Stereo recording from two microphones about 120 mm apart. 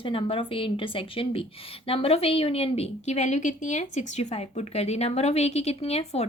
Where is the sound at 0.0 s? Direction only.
50° left (ahead or behind).